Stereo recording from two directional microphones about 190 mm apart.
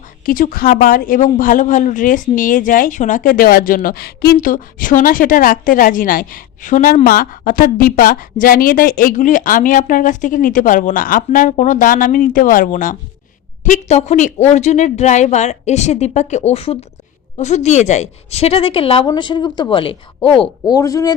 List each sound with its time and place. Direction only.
0.3 s a woman's voice: 45° left (ahead or behind); by 21.2 s 20° left (ahead or behind)